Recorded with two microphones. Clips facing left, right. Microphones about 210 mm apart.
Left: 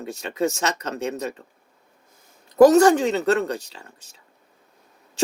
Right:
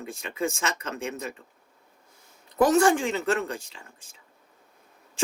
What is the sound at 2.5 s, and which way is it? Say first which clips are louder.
Speech: left 7 dB; 40° left (ahead or behind).